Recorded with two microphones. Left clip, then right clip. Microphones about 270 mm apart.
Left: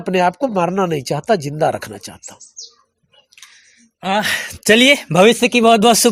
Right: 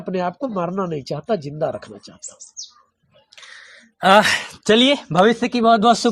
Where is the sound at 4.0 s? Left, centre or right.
Centre.